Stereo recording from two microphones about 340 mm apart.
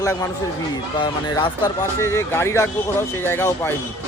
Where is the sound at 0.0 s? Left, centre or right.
Centre.